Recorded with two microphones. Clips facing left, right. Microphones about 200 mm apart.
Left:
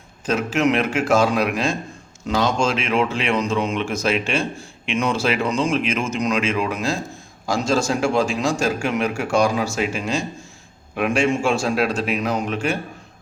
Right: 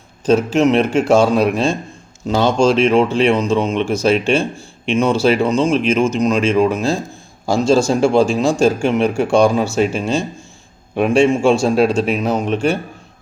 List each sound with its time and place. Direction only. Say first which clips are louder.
0.3 s a man's voice: right 6 dB; 30° right (ahead or behind)